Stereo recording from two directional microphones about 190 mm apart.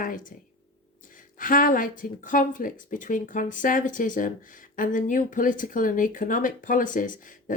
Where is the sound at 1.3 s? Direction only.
45° left (ahead or behind).